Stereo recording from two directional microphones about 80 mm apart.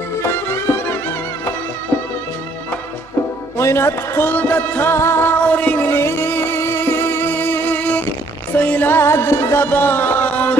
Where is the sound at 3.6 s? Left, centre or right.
Left.